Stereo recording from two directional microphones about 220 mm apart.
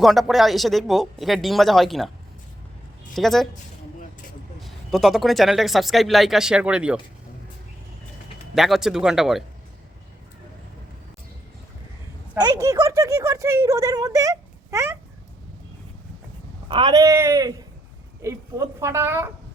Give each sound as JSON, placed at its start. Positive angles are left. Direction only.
{"t": 0.0, "sound": "speech", "side_deg": 0}
{"t": 3.2, "sound": "speech", "side_deg": 0}
{"t": 4.6, "sound": "speech", "side_deg": 0}
{"t": 8.5, "sound": "speech", "side_deg": 0}
{"t": 12.3, "sound": "speech", "side_deg": -15}
{"t": 16.6, "sound": "speech", "side_deg": -20}